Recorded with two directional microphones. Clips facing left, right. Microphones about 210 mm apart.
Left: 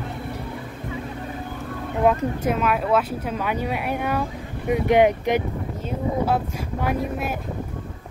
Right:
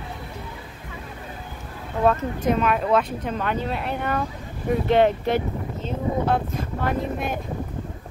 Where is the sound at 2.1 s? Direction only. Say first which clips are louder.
Even; 5° left (ahead or behind).